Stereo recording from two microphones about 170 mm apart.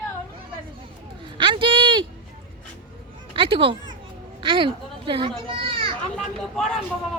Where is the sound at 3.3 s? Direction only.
30° right (ahead or behind).